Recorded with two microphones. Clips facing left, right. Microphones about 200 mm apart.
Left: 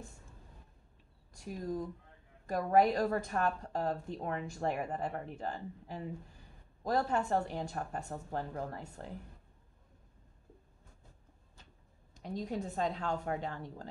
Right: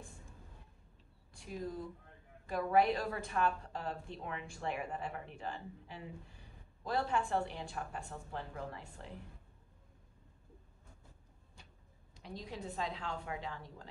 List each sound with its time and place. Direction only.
1.3 s a woman's voice: 40° left (ahead or behind)
12.1 s a woman's voice: 45° left (ahead or behind)